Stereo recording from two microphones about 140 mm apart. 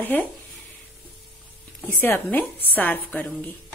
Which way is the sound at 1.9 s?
15° left (ahead or behind).